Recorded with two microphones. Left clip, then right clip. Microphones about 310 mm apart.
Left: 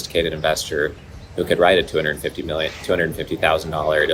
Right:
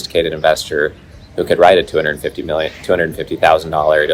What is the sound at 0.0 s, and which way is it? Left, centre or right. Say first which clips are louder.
Speech: right 6 dB; centre.